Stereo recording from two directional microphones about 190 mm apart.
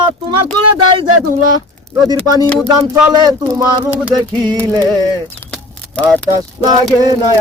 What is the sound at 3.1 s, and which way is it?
Speech, 20° right (ahead or behind).